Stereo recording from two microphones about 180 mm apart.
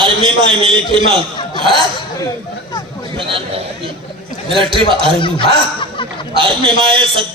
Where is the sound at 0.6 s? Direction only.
30° right (ahead or behind).